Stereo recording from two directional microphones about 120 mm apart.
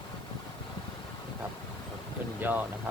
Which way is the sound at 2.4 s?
15° right (ahead or behind).